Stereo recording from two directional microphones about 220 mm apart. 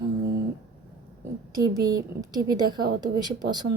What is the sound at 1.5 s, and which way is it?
A woman's voice, 15° right (ahead or behind).